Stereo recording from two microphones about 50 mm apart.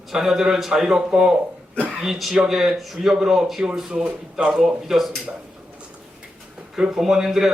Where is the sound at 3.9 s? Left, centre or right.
Centre.